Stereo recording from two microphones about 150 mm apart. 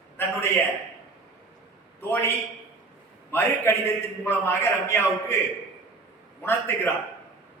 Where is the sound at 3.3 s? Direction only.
15° left (ahead or behind).